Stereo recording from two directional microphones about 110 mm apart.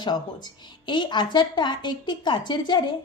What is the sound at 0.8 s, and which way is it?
A woman's voice, 45° left (ahead or behind).